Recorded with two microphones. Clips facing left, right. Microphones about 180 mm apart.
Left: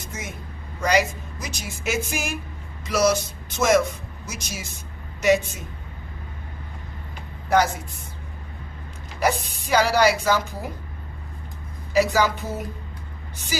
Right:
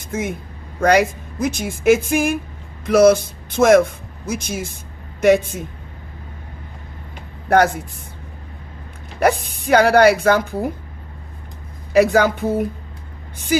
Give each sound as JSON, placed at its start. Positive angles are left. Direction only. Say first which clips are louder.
{"t": 0.0, "sound": "speech", "louder": "right 11 dB", "side_deg": -55}
{"t": 7.4, "sound": "a woman's voice", "louder": "right 5 dB", "side_deg": -55}
{"t": 9.2, "sound": "speech", "louder": "right 6 dB", "side_deg": -55}
{"t": 11.9, "sound": "speech", "louder": "right 6 dB", "side_deg": -55}